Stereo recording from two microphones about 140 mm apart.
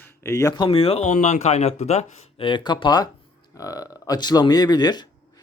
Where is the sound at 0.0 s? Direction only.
20° left (ahead or behind); by 2.5 s 50° left (ahead or behind).